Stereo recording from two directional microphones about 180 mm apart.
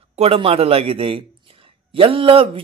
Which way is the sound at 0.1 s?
35° right (ahead or behind).